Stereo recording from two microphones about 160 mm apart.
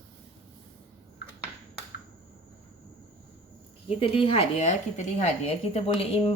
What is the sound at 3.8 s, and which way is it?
A woman's voice, 35° left (ahead or behind).